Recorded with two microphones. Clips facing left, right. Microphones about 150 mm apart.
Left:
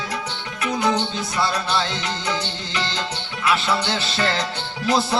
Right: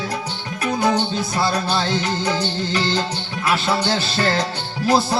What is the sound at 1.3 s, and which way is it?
Music, 35° right (ahead or behind).